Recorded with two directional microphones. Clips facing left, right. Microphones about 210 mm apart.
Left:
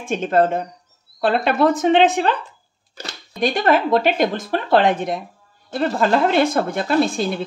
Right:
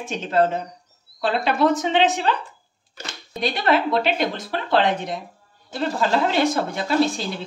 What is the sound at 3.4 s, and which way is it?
A woman's voice, 45° left (ahead or behind).